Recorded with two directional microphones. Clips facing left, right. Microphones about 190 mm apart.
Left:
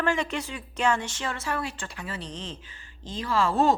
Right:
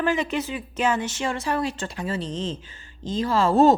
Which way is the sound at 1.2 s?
20° right (ahead or behind).